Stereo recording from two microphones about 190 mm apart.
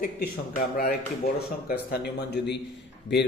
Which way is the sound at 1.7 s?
60° left (ahead or behind).